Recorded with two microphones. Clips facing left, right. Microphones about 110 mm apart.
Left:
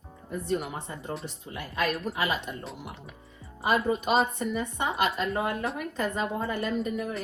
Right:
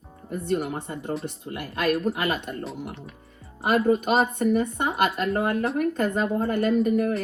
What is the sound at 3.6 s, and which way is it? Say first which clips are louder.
A woman's voice: right 5 dB; 55° right (ahead or behind).